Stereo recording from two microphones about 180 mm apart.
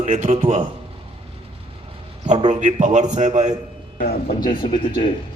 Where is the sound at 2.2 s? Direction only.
40° right (ahead or behind).